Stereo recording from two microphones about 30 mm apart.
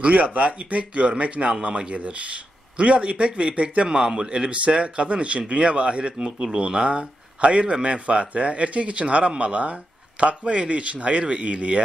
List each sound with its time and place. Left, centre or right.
0.1 s speech: right
3.9 s speech: right
6.2 s speech: right
6.6 s speech: right